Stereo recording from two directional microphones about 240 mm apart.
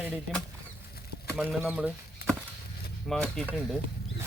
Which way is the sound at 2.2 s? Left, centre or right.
Left.